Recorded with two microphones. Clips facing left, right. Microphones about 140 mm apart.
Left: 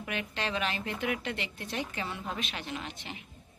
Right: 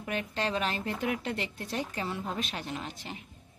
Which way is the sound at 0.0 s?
35° right (ahead or behind).